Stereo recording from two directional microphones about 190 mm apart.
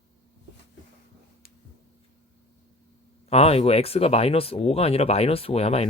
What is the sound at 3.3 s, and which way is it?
Speech, 30° left (ahead or behind).